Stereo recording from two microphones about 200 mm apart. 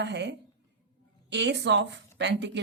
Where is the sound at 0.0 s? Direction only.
60° right (ahead or behind).